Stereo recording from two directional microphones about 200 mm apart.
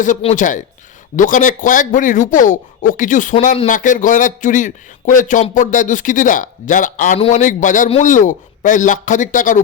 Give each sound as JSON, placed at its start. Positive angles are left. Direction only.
{"t": 0.0, "sound": "a man's voice", "side_deg": 35}